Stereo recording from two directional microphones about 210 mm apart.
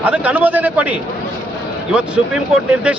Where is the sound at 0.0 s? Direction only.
5° right (ahead or behind).